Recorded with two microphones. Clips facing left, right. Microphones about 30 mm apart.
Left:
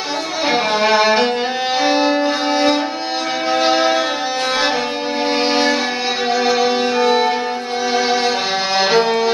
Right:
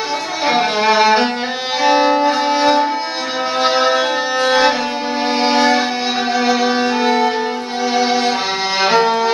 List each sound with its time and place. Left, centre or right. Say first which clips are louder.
0.5 s music: right 1 dB; centre
4.5 s violin: right 5 dB; centre
5.4 s music: right 4 dB; centre
6.7 s music: even; centre